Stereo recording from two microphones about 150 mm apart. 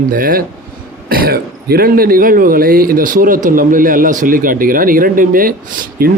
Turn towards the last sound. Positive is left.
turn(degrees=-70)  # may be behind; listen again after turning